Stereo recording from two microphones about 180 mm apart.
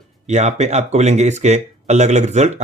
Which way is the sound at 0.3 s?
40° right (ahead or behind).